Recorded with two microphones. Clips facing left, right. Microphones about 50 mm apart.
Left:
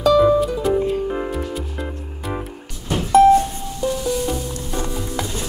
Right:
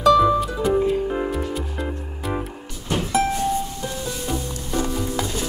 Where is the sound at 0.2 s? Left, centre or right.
Centre.